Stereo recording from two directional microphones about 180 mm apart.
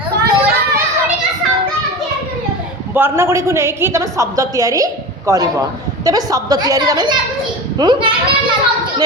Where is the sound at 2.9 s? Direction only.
10° right (ahead or behind).